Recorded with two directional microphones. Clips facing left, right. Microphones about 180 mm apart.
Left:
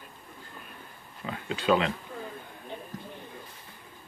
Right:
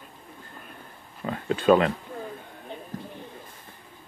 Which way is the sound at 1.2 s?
45° right (ahead or behind).